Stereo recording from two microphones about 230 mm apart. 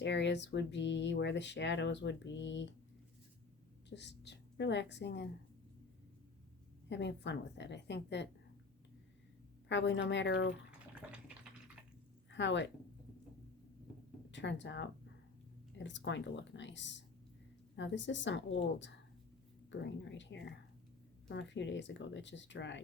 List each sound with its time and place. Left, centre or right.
0.0 s speech: left
3.8 s a woman's voice: left
6.9 s speech: left
9.6 s speech: left
11.0 s a sound: centre
12.3 s a woman's voice: left
14.3 s speech: left